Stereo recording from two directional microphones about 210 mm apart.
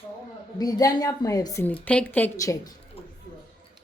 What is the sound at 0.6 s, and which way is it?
A woman's voice, 15° left (ahead or behind).